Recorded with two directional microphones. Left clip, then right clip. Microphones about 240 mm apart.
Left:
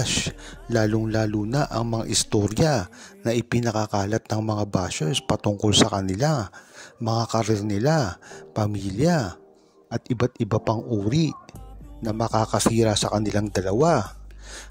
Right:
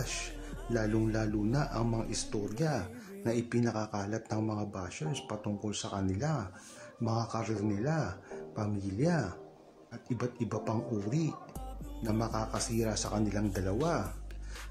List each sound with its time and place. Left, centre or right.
0.0 s speech: left